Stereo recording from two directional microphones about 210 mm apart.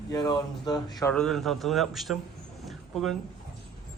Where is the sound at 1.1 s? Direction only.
Centre (ahead or behind).